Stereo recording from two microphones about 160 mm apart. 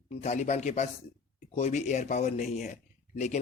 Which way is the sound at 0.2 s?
45° left (ahead or behind).